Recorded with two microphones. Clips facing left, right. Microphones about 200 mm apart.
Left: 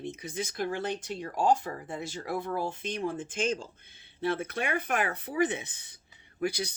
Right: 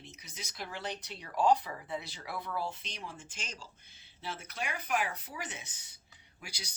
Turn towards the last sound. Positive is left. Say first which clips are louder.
# left 18 dB
turn(degrees=55)  # may be behind; listen again after turning